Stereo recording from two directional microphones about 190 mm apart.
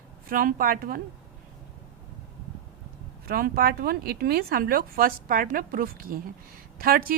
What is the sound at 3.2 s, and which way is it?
A woman's voice, 50° right (ahead or behind).